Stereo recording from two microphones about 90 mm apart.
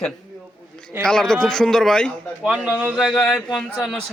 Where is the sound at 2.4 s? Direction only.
10° right (ahead or behind).